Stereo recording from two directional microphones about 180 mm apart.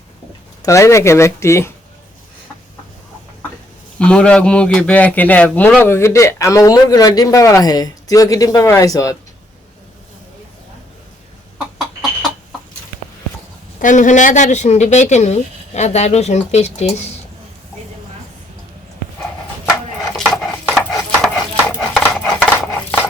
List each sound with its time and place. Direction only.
0.6 s a man's voice: 15° left (ahead or behind)
3.9 s a man's voice: 5° left (ahead or behind)
13.8 s speech: 45° left (ahead or behind)
20.1 s dog: 5° left (ahead or behind)